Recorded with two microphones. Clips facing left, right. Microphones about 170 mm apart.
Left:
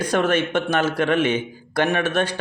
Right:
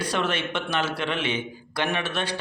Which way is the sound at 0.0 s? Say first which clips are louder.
Left 7 dB; 45° left (ahead or behind).